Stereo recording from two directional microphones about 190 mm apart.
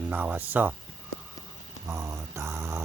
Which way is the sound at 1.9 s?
15° right (ahead or behind).